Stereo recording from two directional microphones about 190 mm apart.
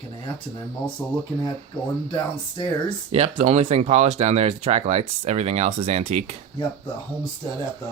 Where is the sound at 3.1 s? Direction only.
30° right (ahead or behind).